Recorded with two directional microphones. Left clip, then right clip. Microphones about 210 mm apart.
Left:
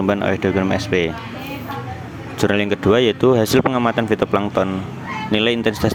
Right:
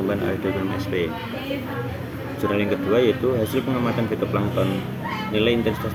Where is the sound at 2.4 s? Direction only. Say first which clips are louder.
Left 5 dB; 45° left (ahead or behind).